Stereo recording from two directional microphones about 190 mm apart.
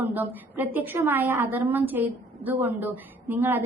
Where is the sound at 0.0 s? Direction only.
10° right (ahead or behind).